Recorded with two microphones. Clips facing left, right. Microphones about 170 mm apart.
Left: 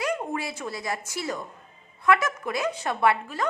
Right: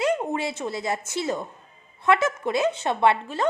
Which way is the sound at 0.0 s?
25° right (ahead or behind).